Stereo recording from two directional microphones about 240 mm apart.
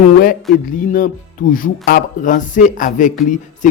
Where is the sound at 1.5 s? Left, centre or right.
Left.